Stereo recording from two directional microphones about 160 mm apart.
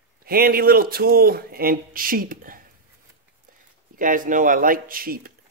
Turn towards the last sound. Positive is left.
turn(degrees=-65)  # may be behind; listen again after turning